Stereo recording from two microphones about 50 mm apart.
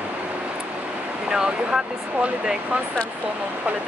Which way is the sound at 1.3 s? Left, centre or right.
Centre.